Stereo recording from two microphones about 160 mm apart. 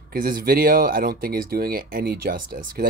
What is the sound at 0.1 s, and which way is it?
Speech, 65° right (ahead or behind).